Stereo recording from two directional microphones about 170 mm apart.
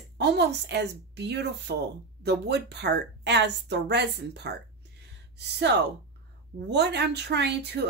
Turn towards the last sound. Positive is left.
turn(degrees=-80)